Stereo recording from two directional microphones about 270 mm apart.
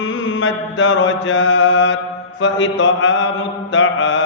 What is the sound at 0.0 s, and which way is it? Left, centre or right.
Mantra, left.